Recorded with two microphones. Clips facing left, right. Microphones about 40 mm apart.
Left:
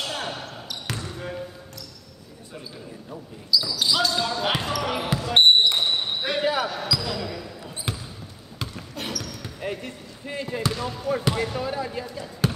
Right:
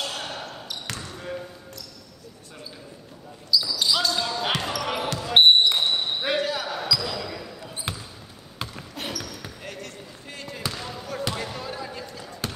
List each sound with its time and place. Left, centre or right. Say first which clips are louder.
0.0 s basketball bounce: left 1 dB; centre
1.0 s basketball bounce: left 1 dB; centre
3.5 s basketball bounce: left 1 dB; centre
6.4 s basketball bounce: left 4 dB; centre
6.7 s basketball bounce: even; centre
9.6 s basketball bounce: left 6 dB; centre
10.6 s basketball bounce: left 3 dB; centre